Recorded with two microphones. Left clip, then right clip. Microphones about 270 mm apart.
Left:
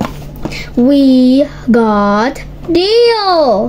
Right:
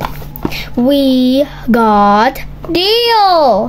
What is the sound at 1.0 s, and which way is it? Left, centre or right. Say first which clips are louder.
A child's voice: left 2 dB; centre.